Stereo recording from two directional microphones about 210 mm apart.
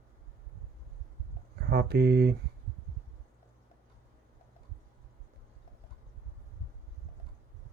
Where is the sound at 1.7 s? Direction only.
50° right (ahead or behind).